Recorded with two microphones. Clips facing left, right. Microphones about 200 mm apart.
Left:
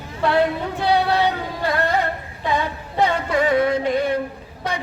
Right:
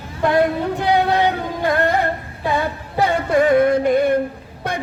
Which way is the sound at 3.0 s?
50° right (ahead or behind).